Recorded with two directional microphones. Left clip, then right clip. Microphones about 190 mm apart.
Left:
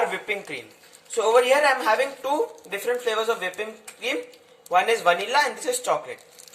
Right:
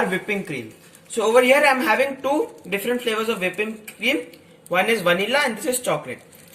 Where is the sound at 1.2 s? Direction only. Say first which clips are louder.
Right 3 dB; 20° left (ahead or behind).